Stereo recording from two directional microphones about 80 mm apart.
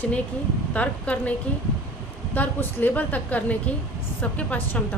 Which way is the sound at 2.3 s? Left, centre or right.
Left.